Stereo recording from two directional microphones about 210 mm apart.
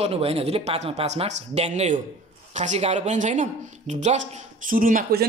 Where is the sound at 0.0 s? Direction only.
30° right (ahead or behind).